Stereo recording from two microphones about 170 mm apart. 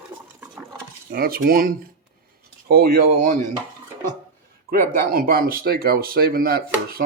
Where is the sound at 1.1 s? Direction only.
60° right (ahead or behind).